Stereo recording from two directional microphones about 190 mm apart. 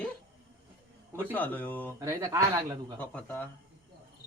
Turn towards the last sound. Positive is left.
turn(degrees=10)  # may be behind; listen again after turning